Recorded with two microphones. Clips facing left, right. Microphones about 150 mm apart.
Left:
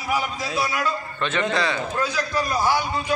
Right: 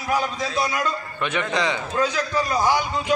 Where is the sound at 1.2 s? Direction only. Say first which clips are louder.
Even; 15° right (ahead or behind).